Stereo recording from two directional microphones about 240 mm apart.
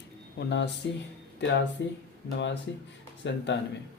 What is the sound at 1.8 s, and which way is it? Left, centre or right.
Speech, left.